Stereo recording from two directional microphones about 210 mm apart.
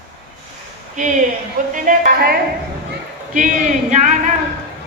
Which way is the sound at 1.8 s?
45° right (ahead or behind).